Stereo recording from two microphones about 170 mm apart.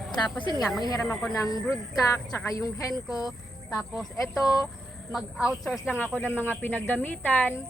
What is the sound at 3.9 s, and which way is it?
Speech, 5° left (ahead or behind).